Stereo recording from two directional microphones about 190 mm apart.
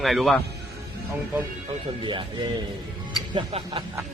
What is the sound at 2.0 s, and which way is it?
Speech, 25° right (ahead or behind).